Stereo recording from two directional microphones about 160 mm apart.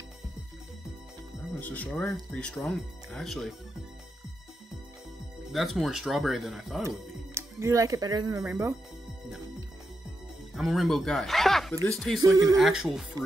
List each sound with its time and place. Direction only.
1.5 s speech: 10° left (ahead or behind)
5.5 s speech: centre (ahead or behind)
7.3 s speech: 20° right (ahead or behind)
10.5 s speech: centre (ahead or behind)
12.2 s speech: 20° right (ahead or behind)
12.5 s speech: centre (ahead or behind)